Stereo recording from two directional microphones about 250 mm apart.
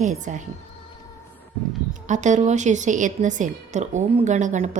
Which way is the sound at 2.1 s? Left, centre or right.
Right.